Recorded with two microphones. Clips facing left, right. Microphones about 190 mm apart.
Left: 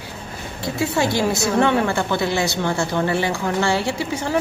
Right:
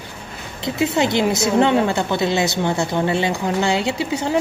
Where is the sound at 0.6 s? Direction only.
20° right (ahead or behind).